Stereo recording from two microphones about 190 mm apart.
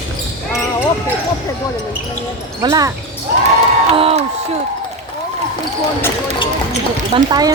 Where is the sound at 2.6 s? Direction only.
20° right (ahead or behind).